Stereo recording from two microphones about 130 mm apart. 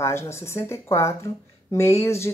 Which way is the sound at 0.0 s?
20° left (ahead or behind).